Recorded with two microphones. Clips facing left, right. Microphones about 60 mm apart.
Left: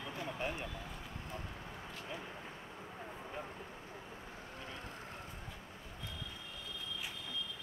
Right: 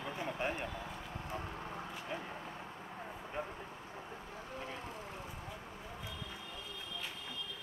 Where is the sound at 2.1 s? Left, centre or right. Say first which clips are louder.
Right 4 dB; right.